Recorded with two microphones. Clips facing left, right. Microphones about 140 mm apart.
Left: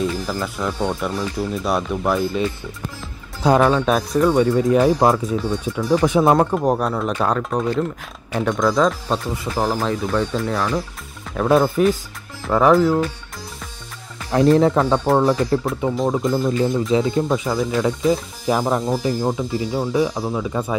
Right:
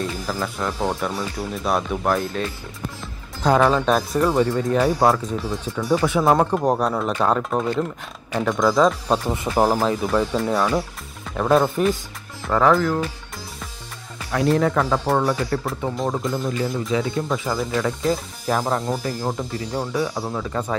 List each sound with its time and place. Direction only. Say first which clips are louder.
0.0 s speech: left 3 dB; centre (ahead or behind)
3.4 s speech: left 2 dB; 5° left (ahead or behind)
5.3 s speech: left 4 dB; centre (ahead or behind)
6.0 s speech: left 3 dB; 20° left (ahead or behind)
6.3 s speech: left 1 dB; centre (ahead or behind)
9.3 s speech: right 5 dB; 25° right (ahead or behind)
9.8 s speech: right 1 dB; 5° right (ahead or behind)
12.4 s speech: left 2 dB; 15° left (ahead or behind)
14.3 s speech: left 5 dB; 25° left (ahead or behind)
15.9 s speech: left 5 dB; centre (ahead or behind)
16.9 s speech: left 4 dB; 25° left (ahead or behind)
17.5 s speech: left 3 dB; centre (ahead or behind)
19.9 s speech: left 6 dB; 20° left (ahead or behind)
20.2 s speech: left 3 dB; 5° left (ahead or behind)